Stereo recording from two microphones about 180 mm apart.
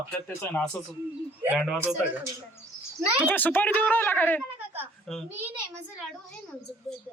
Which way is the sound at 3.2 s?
10° left (ahead or behind).